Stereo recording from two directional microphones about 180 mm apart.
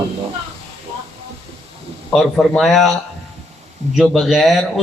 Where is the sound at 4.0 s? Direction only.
Centre (ahead or behind).